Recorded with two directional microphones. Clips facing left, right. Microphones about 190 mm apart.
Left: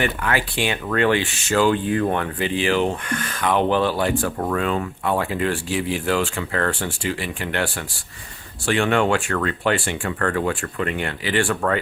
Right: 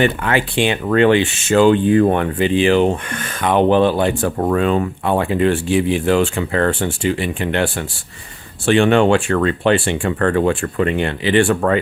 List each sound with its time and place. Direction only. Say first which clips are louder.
0.0 s speech: right 6 dB; 25° right (ahead or behind)